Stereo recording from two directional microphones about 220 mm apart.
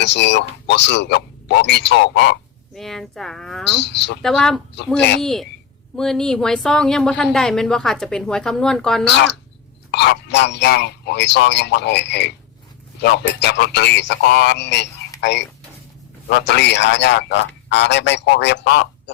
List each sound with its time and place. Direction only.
0.0 s a man's voice: 50° left (ahead or behind)
2.7 s a woman's voice: centre (ahead or behind)
3.8 s a man's voice: 50° left (ahead or behind)
4.2 s a woman's voice: centre (ahead or behind)
9.9 s a man's voice: 50° left (ahead or behind)